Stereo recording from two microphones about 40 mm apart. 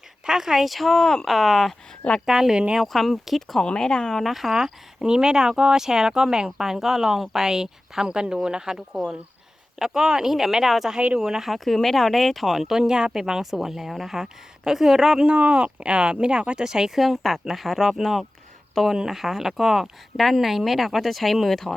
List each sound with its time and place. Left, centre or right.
0.3 s speech: centre
1.0 s speech: centre
1.3 s speech: centre
2.2 s speech: centre
2.8 s speech: centre
3.8 s speech: centre
4.2 s speech: centre
11.4 s speech: centre
15.3 s speech: right
17.0 s speech: centre
18.9 s speech: centre